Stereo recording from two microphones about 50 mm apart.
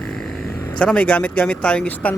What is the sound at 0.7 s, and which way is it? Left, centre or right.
Speech, left.